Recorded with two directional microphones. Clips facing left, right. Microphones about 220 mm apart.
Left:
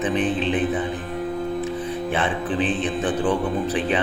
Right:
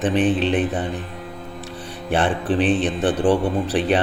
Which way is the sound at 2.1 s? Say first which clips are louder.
Right 6 dB; 75° right (ahead or behind).